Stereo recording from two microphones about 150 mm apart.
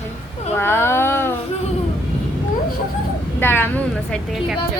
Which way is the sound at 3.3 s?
15° left (ahead or behind).